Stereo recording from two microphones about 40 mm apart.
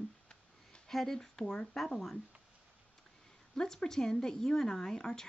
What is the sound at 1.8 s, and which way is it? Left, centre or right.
Speech, centre.